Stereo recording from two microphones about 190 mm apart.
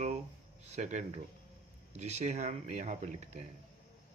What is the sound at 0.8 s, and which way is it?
Speech, 40° right (ahead or behind).